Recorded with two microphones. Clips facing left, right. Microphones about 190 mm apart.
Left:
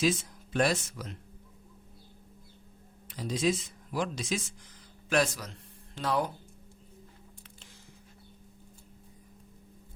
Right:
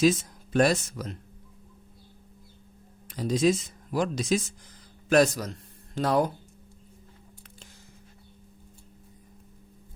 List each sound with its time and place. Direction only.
0.0 s speech: 40° right (ahead or behind)
3.1 s speech: 45° right (ahead or behind)